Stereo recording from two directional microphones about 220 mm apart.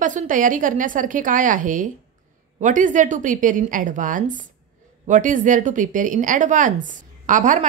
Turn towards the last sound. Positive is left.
turn(degrees=-35)  # may be behind; listen again after turning